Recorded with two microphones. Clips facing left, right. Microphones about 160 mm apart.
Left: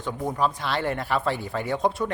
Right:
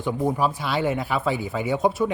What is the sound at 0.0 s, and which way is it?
Speech, 15° right (ahead or behind).